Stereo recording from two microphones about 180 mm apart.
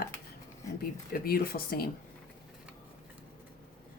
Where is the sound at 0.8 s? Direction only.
55° left (ahead or behind).